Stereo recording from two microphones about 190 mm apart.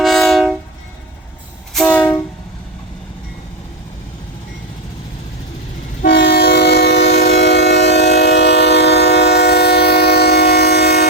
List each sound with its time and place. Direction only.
0.0 s train: centre (ahead or behind)
1.7 s train: 5° left (ahead or behind)
6.0 s train: 55° left (ahead or behind)